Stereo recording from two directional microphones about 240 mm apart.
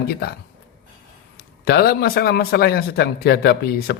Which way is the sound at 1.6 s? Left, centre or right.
Left.